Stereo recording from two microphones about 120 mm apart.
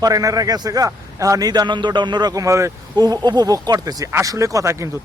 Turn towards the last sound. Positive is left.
turn(degrees=-25)  # may be behind; listen again after turning